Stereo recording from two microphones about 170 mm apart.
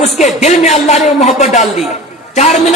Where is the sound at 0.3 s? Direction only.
40° left (ahead or behind).